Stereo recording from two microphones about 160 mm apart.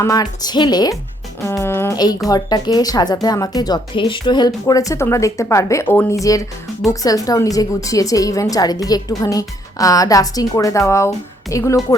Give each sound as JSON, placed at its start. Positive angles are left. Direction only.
{"t": 0.0, "sound": "a woman's voice", "side_deg": 25}